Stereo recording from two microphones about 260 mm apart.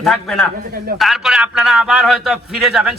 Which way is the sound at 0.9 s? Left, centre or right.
Centre.